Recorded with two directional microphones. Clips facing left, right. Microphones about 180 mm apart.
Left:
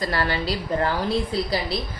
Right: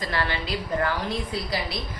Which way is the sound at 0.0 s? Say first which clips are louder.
Left 4 dB; 40° left (ahead or behind).